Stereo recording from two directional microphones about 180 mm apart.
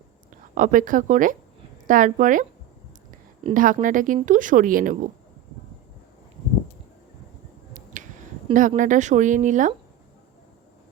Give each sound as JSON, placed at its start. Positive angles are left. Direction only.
{"t": 0.5, "sound": "speech", "side_deg": -45}
{"t": 3.5, "sound": "speech", "side_deg": -50}
{"t": 8.0, "sound": "finger snapping", "side_deg": -45}
{"t": 8.5, "sound": "speech", "side_deg": -45}